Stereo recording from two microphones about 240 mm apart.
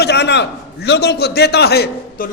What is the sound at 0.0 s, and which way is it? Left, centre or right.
A man's voice, left.